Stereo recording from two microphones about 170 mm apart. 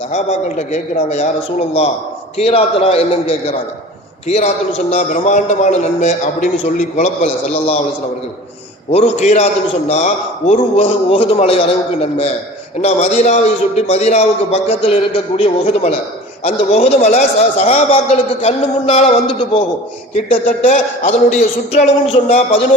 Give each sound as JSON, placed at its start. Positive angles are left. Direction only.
{"t": 0.1, "sound": "a man's voice", "side_deg": 40}
{"t": 8.9, "sound": "a man's voice", "side_deg": 40}
{"t": 12.8, "sound": "a man's voice", "side_deg": 40}